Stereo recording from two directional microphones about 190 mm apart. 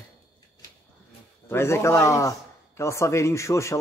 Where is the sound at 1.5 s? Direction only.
15° left (ahead or behind).